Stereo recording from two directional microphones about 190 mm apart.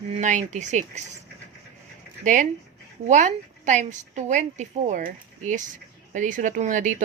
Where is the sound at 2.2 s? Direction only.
40° right (ahead or behind).